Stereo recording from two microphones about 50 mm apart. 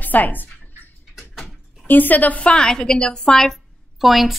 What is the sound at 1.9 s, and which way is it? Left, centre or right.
A woman's voice, left.